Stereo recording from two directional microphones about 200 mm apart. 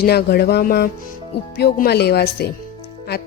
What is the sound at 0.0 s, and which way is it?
Speech, 55° left (ahead or behind).